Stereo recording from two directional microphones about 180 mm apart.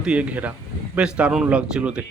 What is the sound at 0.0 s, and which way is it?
Speech, 5° right (ahead or behind).